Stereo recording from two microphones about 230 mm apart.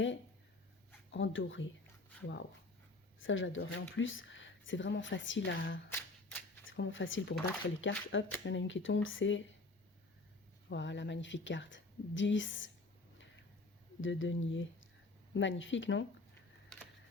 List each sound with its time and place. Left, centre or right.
1.1 s speech: left
5.9 s shuffling cards: centre
6.7 s speech: left
10.7 s a woman's voice: left
14.0 s speech: left
16.7 s camera: centre